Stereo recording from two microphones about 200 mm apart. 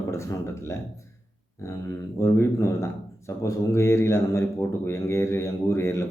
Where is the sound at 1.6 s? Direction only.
15° left (ahead or behind).